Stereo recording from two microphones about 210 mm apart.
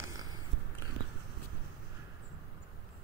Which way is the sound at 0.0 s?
15° right (ahead or behind).